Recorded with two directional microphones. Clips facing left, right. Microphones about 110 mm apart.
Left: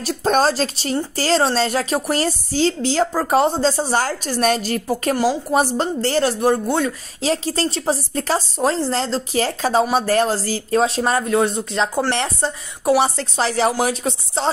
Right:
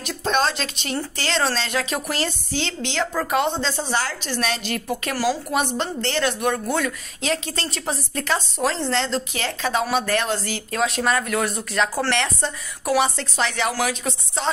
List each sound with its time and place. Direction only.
0.0 s a woman's voice: 35° left (ahead or behind)
5.1 s a woman's voice: 20° left (ahead or behind)
5.5 s a woman's voice: 35° left (ahead or behind)